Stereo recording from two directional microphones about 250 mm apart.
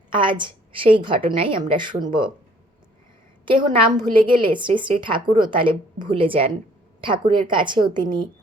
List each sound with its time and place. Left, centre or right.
0.1 s a woman's voice: centre
3.4 s a woman's voice: centre